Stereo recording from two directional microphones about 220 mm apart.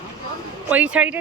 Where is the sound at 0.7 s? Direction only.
5° right (ahead or behind).